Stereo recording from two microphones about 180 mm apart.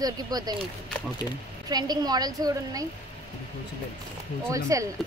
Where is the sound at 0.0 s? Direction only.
20° right (ahead or behind).